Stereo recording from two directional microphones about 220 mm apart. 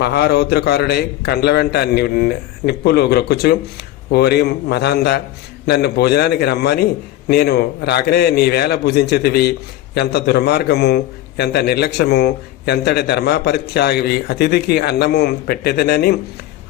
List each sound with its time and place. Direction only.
0.0 s a man's voice: 50° left (ahead or behind)